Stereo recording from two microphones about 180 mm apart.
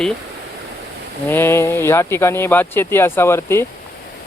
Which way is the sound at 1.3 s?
15° left (ahead or behind).